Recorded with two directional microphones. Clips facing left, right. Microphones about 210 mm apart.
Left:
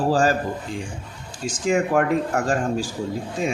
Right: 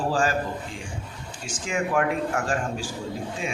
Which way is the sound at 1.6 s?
40° left (ahead or behind).